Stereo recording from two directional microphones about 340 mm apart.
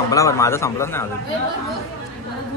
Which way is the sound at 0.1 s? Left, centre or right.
Centre.